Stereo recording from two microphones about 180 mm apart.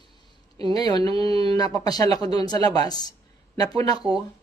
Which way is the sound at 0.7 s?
20° left (ahead or behind).